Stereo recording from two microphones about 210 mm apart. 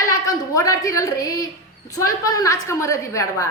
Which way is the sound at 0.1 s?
15° left (ahead or behind).